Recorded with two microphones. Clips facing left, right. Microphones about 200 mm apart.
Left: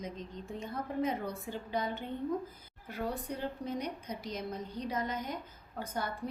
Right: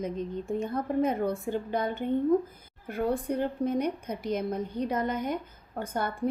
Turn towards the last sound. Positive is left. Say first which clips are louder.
# right 6 dB
turn(degrees=-55)  # may be behind; listen again after turning